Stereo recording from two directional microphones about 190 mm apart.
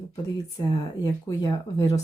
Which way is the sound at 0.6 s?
20° left (ahead or behind).